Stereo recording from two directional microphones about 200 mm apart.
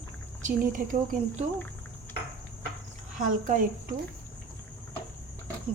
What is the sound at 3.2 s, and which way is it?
Speech, 40° right (ahead or behind).